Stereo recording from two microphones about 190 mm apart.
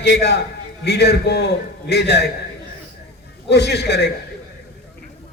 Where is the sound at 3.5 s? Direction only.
60° left (ahead or behind).